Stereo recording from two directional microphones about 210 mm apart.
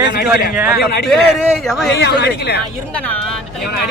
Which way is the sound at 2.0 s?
55° left (ahead or behind).